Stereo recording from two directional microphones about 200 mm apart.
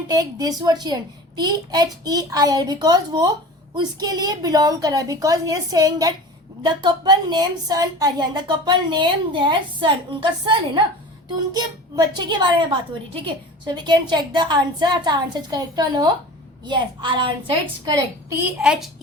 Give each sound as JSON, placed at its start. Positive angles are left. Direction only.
{"t": 0.1, "sound": "a woman's voice", "side_deg": -20}
{"t": 18.6, "sound": "a child's voice", "side_deg": -5}